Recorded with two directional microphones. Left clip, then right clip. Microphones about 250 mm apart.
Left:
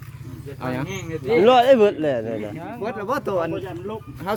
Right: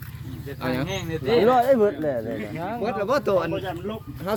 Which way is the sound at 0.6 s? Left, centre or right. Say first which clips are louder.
Right 1 dB; left.